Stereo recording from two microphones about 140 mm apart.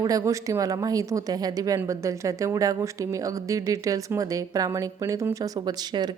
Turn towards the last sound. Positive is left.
turn(degrees=-30)  # may be behind; listen again after turning